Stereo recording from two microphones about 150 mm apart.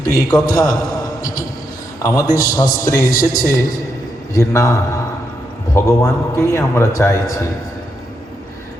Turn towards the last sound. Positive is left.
turn(degrees=20)  # may be behind; listen again after turning